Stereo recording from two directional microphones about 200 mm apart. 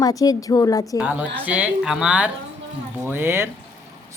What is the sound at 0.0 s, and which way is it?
Speech, 20° left (ahead or behind).